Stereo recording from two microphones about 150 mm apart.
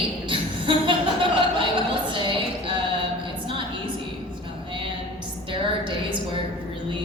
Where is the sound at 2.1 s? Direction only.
30° right (ahead or behind).